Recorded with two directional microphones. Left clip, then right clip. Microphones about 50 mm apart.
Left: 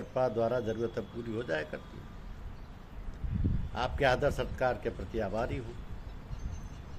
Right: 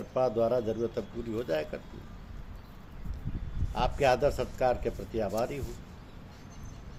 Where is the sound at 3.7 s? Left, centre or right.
Centre.